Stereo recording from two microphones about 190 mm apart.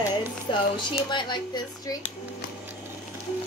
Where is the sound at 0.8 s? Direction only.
25° left (ahead or behind).